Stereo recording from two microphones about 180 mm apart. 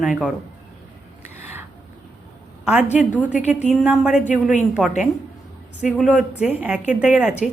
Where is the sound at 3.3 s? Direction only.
40° left (ahead or behind).